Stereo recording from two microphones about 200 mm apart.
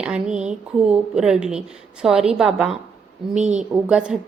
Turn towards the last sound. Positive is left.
turn(degrees=-5)  # may be behind; listen again after turning